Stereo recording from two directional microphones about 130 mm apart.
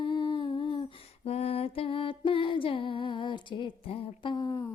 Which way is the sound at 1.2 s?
50° left (ahead or behind).